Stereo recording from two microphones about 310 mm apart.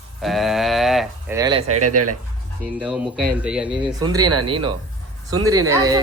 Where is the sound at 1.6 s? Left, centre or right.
Right.